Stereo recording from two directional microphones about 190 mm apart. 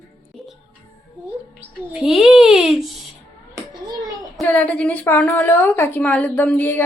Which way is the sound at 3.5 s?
20° right (ahead or behind).